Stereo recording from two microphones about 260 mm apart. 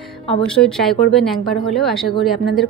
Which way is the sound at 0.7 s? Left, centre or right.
Centre.